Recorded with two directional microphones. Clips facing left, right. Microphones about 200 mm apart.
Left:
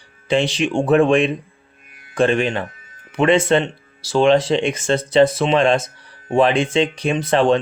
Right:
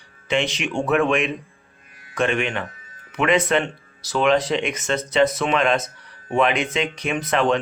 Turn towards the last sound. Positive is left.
turn(degrees=30)  # may be behind; listen again after turning